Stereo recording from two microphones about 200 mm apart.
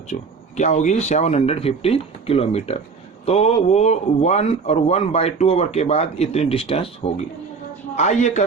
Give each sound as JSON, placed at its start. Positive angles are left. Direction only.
{"t": 0.1, "sound": "a man's voice", "side_deg": 35}